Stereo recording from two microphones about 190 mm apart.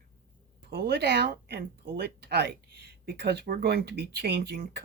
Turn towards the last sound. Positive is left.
turn(degrees=-55)  # may be behind; listen again after turning